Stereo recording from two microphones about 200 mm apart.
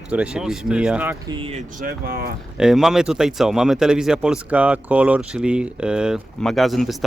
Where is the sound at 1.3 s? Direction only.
25° right (ahead or behind).